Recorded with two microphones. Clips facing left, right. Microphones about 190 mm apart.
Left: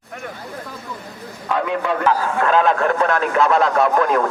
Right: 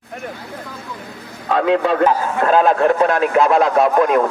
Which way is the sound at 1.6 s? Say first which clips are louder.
Right 10 dB; 90° right.